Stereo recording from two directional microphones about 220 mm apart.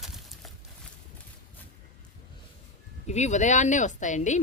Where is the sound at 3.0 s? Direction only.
30° left (ahead or behind).